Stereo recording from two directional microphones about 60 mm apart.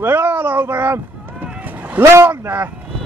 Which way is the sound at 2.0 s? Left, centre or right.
Right.